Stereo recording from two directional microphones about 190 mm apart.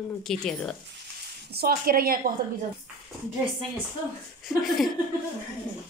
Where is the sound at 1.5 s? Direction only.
55° right (ahead or behind).